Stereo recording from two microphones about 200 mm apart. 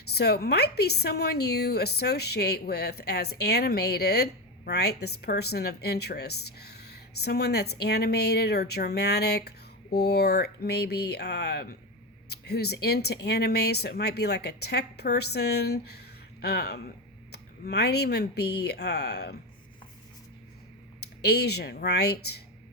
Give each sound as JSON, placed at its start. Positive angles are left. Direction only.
{"t": 0.1, "sound": "speech", "side_deg": 55}
{"t": 21.0, "sound": "speech", "side_deg": 55}